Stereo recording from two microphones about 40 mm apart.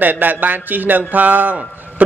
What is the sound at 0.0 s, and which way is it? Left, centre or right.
A man's voice, right.